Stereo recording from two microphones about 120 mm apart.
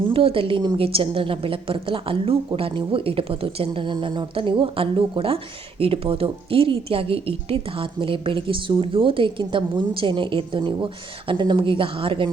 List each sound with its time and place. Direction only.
0.1 s a woman's voice: 50° right (ahead or behind)